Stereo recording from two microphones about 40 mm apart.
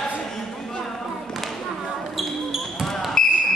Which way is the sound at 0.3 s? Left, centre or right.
Centre.